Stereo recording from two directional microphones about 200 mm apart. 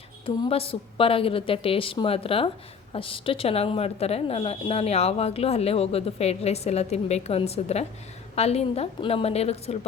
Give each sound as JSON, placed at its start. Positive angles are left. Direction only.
{"t": 0.3, "sound": "a woman's voice", "side_deg": 30}